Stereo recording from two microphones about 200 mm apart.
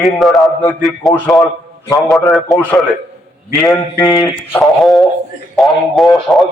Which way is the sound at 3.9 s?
15° left (ahead or behind).